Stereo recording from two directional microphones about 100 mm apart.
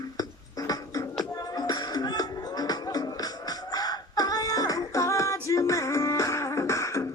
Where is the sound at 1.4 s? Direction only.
40° left (ahead or behind).